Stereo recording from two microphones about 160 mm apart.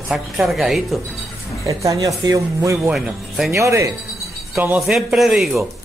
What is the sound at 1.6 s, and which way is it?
A man's voice, 20° right (ahead or behind).